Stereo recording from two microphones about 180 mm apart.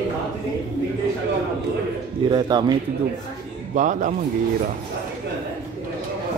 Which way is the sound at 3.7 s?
45° right (ahead or behind).